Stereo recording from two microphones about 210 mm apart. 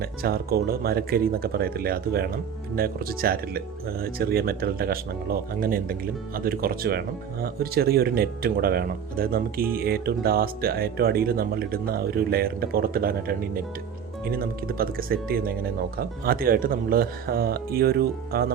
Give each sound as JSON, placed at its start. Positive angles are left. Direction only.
{"t": 0.0, "sound": "speech", "side_deg": -45}